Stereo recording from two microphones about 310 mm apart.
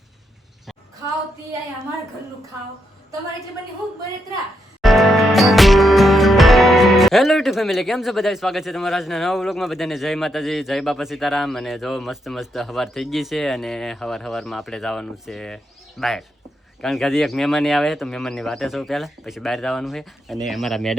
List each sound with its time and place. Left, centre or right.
4.8 s music: centre
16.8 s speech: centre